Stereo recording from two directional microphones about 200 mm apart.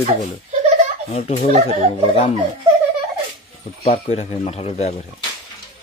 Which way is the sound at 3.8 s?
35° left (ahead or behind).